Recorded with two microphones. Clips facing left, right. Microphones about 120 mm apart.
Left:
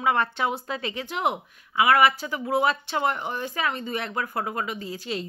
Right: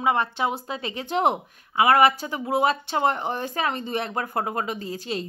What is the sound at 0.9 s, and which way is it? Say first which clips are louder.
Speech: right 6 dB; 35° right (ahead or behind).